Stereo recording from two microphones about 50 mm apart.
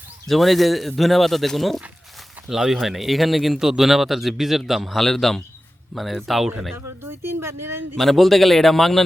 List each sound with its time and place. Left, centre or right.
0.3 s speech: centre
2.5 s speech: centre
7.0 s speech: right
7.9 s speech: centre